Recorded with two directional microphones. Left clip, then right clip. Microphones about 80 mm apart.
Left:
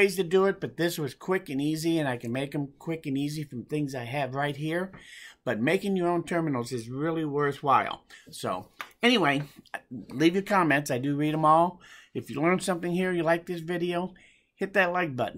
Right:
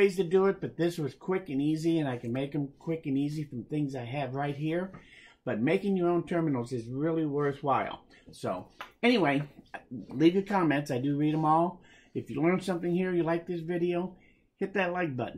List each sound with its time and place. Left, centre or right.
0.0 s speech: left